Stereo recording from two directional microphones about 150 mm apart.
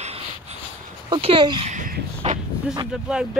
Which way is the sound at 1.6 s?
55° right (ahead or behind).